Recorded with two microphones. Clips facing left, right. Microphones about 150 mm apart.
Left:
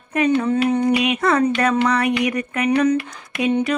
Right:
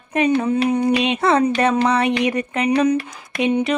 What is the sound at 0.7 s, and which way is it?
Speech, 10° right (ahead or behind).